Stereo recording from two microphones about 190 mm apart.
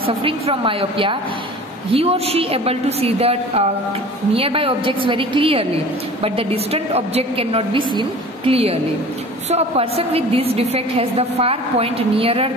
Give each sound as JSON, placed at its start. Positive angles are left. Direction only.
{"t": 0.0, "sound": "a woman's voice", "side_deg": -30}